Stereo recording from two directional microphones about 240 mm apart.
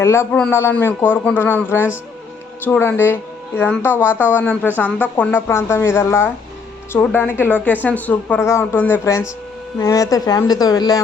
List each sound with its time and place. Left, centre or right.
0.0 s a woman's voice: centre